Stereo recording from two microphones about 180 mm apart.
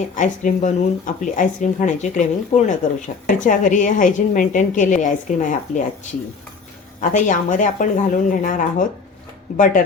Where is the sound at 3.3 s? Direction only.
45° left (ahead or behind).